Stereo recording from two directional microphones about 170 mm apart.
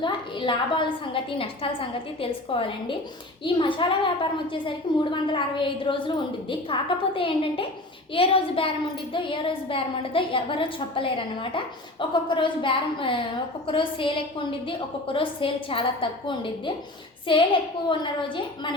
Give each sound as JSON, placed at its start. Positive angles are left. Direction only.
{"t": 0.0, "sound": "a woman's voice", "side_deg": 30}